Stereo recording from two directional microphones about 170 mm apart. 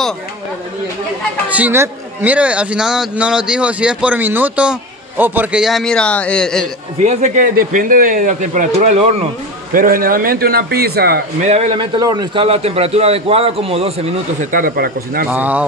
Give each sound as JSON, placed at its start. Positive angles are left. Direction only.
{"t": 1.5, "sound": "a man's voice", "side_deg": -10}
{"t": 7.0, "sound": "speech", "side_deg": -45}
{"t": 9.7, "sound": "a man's voice", "side_deg": -55}
{"t": 11.4, "sound": "a man's voice", "side_deg": -40}
{"t": 12.4, "sound": "a man's voice", "side_deg": -35}
{"t": 14.5, "sound": "a man's voice", "side_deg": -60}
{"t": 15.2, "sound": "a man's voice", "side_deg": -10}